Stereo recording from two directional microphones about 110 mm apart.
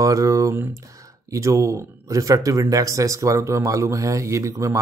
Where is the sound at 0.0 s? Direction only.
30° right (ahead or behind).